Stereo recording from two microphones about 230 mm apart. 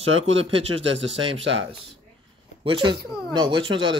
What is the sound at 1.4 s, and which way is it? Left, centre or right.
Speech, right.